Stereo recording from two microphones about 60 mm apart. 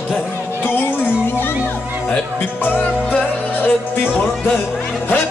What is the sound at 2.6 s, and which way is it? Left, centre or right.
Music, left.